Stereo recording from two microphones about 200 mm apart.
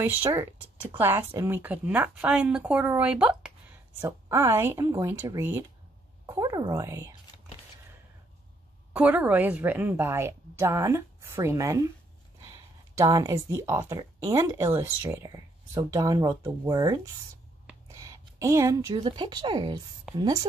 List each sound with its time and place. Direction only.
0.0 s speech: 10° right (ahead or behind)
8.9 s speech: 10° right (ahead or behind)
13.0 s a woman's voice: 15° right (ahead or behind)